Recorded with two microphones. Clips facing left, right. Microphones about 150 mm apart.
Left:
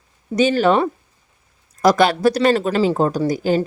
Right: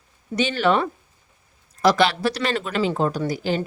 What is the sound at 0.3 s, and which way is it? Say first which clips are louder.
Speech: left 5 dB; 40° left (ahead or behind).